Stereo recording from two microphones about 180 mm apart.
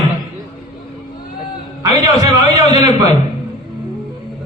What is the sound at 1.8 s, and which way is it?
A man's voice, 20° right (ahead or behind).